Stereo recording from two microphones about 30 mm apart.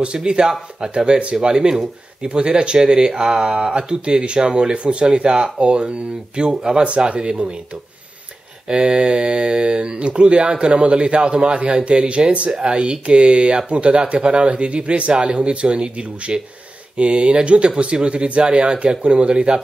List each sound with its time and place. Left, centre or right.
0.0 s speech: right
0.5 s mantra: right
0.9 s speech: right
6.5 s mantra: right
7.1 s speech: right
8.6 s mantra: right
9.9 s speech: right
15.1 s speech: right